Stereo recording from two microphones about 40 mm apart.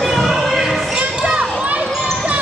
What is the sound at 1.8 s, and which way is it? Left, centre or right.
Basketball bounce, centre.